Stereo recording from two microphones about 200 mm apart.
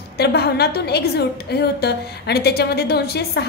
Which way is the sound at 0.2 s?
55° left (ahead or behind).